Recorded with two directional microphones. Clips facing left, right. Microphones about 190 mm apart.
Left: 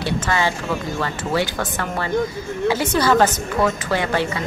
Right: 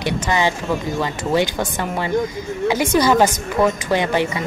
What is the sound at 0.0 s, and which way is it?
Speech, 20° right (ahead or behind).